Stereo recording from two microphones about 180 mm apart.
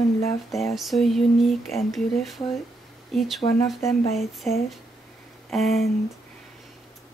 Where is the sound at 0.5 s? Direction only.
Centre (ahead or behind).